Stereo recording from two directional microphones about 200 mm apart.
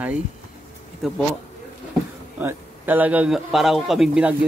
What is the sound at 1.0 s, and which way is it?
Speech, centre (ahead or behind).